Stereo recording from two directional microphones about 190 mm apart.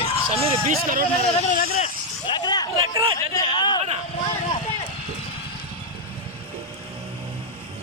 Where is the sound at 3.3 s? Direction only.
25° left (ahead or behind).